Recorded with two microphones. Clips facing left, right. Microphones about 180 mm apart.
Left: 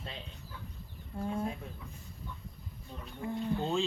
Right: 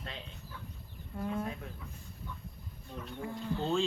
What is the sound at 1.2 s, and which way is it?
Speech, 30° left (ahead or behind).